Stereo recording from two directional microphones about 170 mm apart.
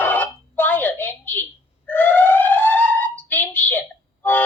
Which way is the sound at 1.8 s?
10° left (ahead or behind).